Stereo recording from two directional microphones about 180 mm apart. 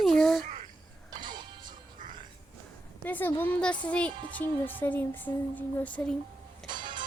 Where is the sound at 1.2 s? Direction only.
25° right (ahead or behind).